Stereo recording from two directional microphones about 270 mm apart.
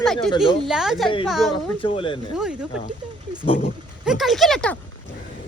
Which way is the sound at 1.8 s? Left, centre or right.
Centre.